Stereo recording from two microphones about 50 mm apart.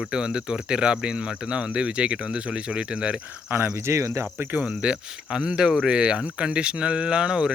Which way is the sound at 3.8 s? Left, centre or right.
Right.